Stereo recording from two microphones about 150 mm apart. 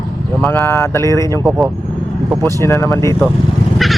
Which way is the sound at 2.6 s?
15° left (ahead or behind).